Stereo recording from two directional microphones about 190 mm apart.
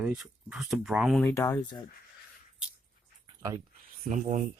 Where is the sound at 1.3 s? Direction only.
15° left (ahead or behind).